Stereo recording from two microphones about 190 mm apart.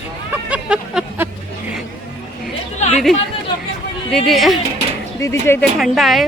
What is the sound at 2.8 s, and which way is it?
Chatter, 35° left (ahead or behind).